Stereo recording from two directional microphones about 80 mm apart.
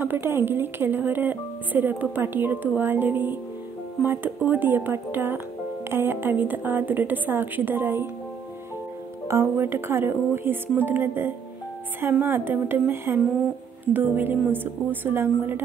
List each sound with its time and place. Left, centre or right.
0.0 s speech: right
9.3 s speech: right